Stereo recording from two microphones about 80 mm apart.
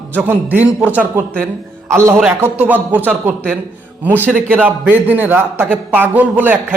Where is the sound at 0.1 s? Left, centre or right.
Right.